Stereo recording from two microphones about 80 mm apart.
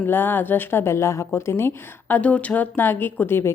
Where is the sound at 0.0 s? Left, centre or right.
Left.